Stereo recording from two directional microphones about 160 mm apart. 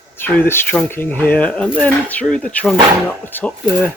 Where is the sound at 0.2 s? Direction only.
10° left (ahead or behind).